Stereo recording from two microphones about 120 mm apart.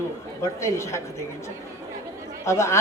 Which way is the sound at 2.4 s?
25° left (ahead or behind).